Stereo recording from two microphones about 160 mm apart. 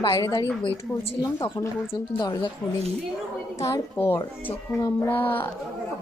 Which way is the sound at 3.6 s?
20° left (ahead or behind).